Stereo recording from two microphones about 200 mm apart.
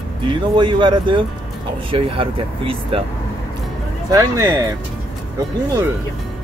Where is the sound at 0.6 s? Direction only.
25° right (ahead or behind).